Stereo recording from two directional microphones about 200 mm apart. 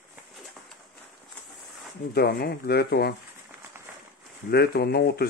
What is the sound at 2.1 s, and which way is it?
Speech, 50° left (ahead or behind).